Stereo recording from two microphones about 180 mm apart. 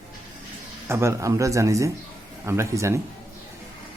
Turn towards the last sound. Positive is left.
turn(degrees=-15)  # may be behind; listen again after turning